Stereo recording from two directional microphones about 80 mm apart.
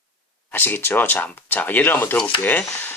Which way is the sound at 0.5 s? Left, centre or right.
Left.